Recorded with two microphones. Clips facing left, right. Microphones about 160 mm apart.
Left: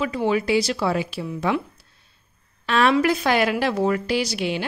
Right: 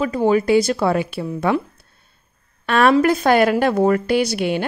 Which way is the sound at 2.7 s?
50° right (ahead or behind).